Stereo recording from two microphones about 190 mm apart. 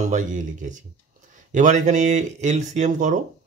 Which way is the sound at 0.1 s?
40° right (ahead or behind).